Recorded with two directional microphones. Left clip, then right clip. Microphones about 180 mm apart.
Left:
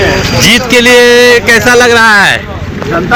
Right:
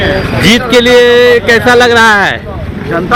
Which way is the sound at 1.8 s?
15° right (ahead or behind).